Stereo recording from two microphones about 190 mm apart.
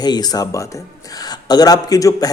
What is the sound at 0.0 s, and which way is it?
Speech, 20° left (ahead or behind).